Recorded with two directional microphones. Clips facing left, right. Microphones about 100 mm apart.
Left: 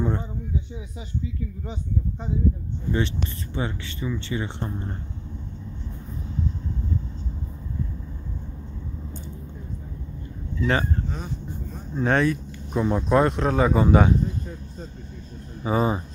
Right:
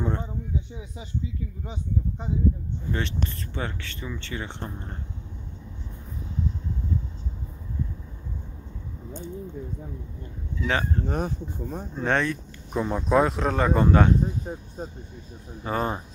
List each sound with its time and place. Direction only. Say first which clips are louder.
0.0 s a sound: left 2 dB; 5° left (ahead or behind)
3.5 s speech: left 3 dB; 5° left (ahead or behind)
10.6 s speech: left 3 dB; 5° left (ahead or behind)
11.1 s speech: right 5 dB; 60° right (ahead or behind)
11.9 s speech: left 4 dB; 5° left (ahead or behind)
14.2 s speech: even; 55° right (ahead or behind)
15.6 s speech: left 4 dB; 5° left (ahead or behind)